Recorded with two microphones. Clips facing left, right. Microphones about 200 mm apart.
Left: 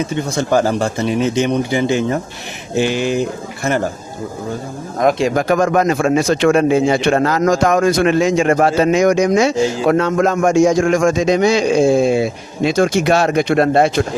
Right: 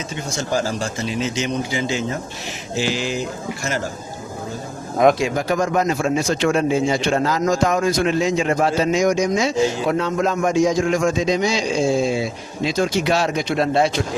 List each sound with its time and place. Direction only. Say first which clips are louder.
0.1 s speech: left 7 dB; 60° left (ahead or behind)
5.3 s speech: left 5 dB; 55° left (ahead or behind); by 7.8 s 85° left
7.9 s a man's voice: left 5 dB; 65° left (ahead or behind); by 8.4 s 90° left
8.4 s speech: left 5 dB; 60° left (ahead or behind)
10.8 s speech: left 5 dB; 50° left (ahead or behind)
11.1 s speech: left 6 dB; 75° left (ahead or behind); by 14.0 s 55° left (ahead or behind)